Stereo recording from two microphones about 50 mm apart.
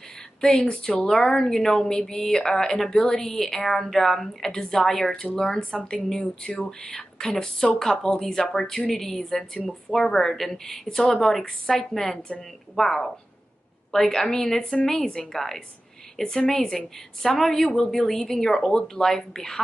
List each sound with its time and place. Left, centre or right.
0.4 s a woman's voice: centre